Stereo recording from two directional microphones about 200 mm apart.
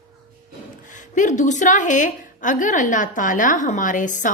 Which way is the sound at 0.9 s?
40° left (ahead or behind).